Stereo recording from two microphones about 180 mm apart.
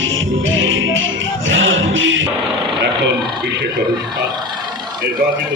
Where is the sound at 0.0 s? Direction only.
90° right.